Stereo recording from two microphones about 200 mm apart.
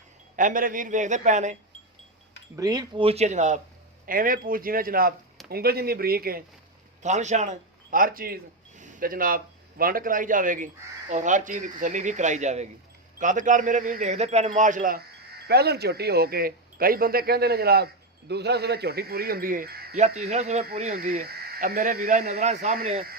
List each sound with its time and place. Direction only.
0.3 s a man's voice: 40° right (ahead or behind)
2.6 s speech: 20° right (ahead or behind); by 6.4 s 50° right (ahead or behind)
7.0 s a man's voice: 35° right (ahead or behind)
20.0 s a man's voice: 35° right (ahead or behind)